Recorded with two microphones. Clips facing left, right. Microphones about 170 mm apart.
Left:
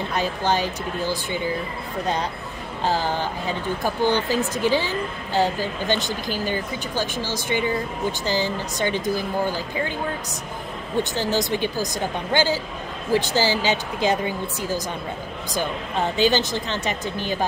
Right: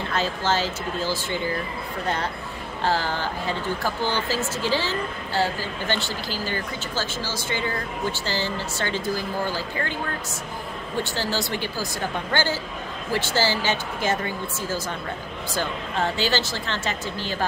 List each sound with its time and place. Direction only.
0.1 s speech: 15° left (ahead or behind)
2.8 s speech: 15° left (ahead or behind)
11.0 s speech: 20° left (ahead or behind)